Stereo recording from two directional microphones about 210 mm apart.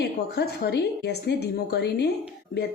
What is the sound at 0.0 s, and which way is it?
A woman's voice, 50° left (ahead or behind).